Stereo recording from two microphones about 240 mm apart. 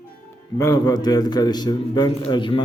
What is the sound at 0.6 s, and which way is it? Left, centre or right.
A man's voice, centre.